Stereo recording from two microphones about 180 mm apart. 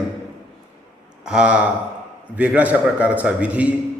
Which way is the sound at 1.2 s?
5° right (ahead or behind).